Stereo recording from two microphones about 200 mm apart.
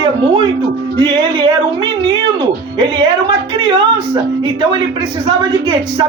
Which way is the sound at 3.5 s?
25° right (ahead or behind).